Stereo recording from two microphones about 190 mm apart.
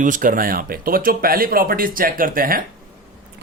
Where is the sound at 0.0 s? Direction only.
45° right (ahead or behind).